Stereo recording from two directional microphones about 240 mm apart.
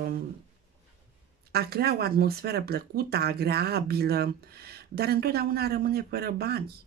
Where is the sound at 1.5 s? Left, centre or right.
Right.